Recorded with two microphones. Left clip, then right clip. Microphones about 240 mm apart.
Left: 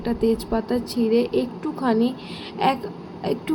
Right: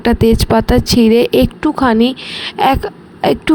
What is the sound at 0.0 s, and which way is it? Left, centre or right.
A woman's voice, right.